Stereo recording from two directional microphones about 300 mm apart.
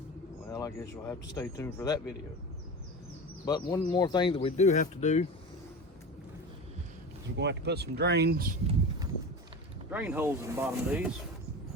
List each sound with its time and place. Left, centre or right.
0.5 s speech: centre
3.4 s speech: centre
7.3 s speech: right
9.9 s speech: centre